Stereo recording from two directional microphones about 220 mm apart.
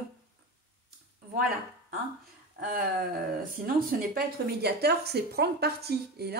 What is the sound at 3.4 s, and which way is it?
Speech, 40° right (ahead or behind).